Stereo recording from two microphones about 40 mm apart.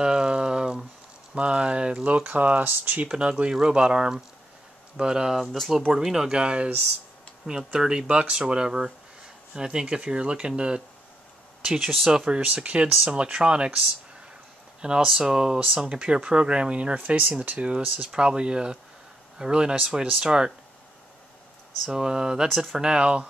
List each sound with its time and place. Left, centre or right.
0.0 s a sound: centre
1.3 s speech: right
3.1 s speech: right
5.3 s speech: centre
6.1 s speech: centre
16.9 s speech: right; by 20.5 s centre
21.8 s speech: centre